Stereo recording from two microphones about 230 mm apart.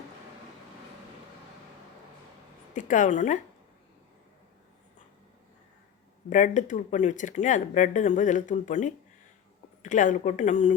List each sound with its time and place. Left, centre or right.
2.7 s speech: left
6.3 s speech: left